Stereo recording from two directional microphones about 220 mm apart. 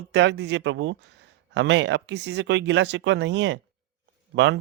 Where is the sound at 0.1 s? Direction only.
50° right (ahead or behind).